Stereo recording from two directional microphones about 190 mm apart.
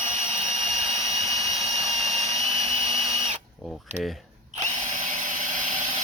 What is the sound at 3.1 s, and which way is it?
Drill, 35° right (ahead or behind).